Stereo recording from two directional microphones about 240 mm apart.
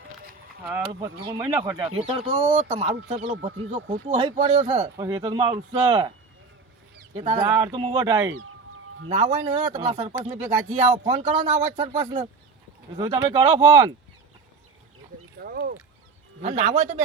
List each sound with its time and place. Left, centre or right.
0.9 s speech: centre
2.0 s speech: right
4.9 s speech: centre
7.1 s speech: centre
8.3 s speech: right
9.0 s speech: right
11.1 s speech: right
11.8 s speech: centre
15.4 s a sound: right
16.4 s speech: right